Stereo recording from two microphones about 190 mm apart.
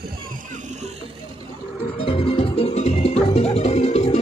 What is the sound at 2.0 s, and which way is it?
Music, 30° left (ahead or behind).